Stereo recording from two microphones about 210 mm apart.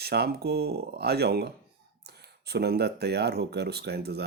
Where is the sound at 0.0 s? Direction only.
50° right (ahead or behind).